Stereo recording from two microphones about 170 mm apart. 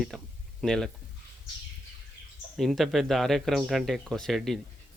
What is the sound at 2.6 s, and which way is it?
Speech, centre (ahead or behind).